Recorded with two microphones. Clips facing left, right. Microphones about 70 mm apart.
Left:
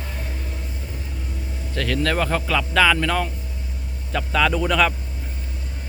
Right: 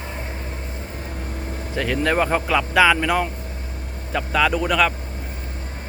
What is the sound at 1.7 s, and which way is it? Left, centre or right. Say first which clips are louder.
Speech: right 2 dB; centre.